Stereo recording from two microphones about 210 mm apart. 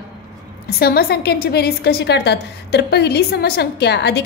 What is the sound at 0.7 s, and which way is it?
A woman's voice, 45° left (ahead or behind).